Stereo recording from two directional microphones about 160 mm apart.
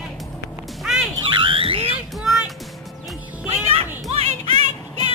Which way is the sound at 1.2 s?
30° right (ahead or behind).